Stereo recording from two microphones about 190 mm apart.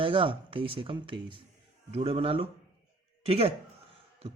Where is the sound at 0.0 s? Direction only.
30° right (ahead or behind).